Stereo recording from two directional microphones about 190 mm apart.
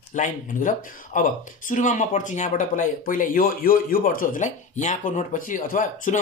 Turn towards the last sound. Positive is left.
turn(degrees=45)  # may be behind; listen again after turning